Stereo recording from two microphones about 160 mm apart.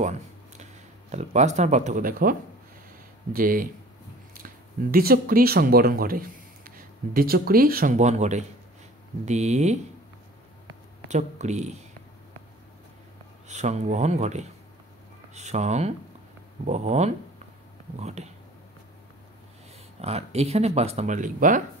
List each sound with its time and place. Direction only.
1.1 s speech: 45° right (ahead or behind); by 2.3 s 60° right (ahead or behind)
3.3 s speech: 60° right (ahead or behind)
4.9 s speech: 70° right (ahead or behind); by 9.8 s 45° right (ahead or behind)
11.1 s speech: 45° right (ahead or behind)
13.5 s speech: 45° right (ahead or behind)
20.0 s speech: 40° right (ahead or behind)